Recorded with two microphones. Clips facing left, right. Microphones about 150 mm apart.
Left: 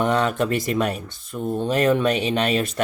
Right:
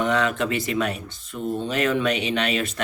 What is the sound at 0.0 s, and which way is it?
Speech, 45° left (ahead or behind).